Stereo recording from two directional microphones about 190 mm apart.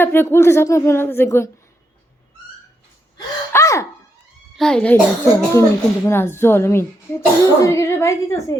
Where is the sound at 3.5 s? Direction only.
15° left (ahead or behind).